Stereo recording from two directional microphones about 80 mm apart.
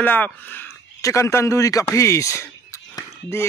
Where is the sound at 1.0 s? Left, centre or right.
Left.